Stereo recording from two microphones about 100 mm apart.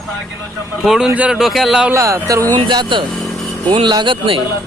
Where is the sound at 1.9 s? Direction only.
30° right (ahead or behind).